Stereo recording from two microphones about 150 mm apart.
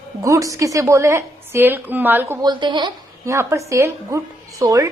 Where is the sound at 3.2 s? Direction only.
15° right (ahead or behind).